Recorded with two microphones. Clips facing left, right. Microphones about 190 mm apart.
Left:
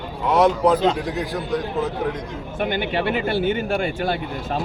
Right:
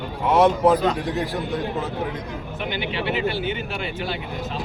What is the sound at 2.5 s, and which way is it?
Speech, 50° left (ahead or behind).